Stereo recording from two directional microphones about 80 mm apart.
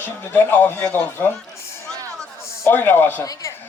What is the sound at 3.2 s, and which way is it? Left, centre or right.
Speech, left.